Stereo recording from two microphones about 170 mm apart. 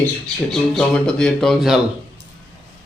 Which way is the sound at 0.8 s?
5° left (ahead or behind).